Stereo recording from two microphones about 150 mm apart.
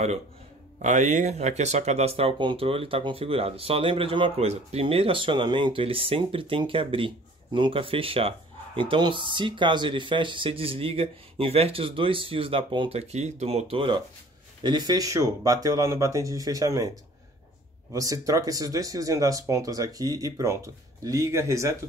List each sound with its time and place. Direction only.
0.8 s speech: 55° right (ahead or behind); by 16.9 s 25° right (ahead or behind)
17.9 s speech: 20° right (ahead or behind)